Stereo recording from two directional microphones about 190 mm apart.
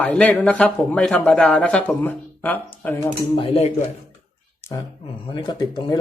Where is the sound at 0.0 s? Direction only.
10° left (ahead or behind).